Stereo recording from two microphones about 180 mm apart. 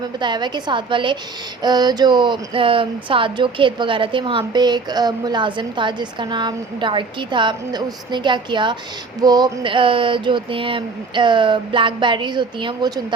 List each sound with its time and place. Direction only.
0.2 s speech: 25° right (ahead or behind)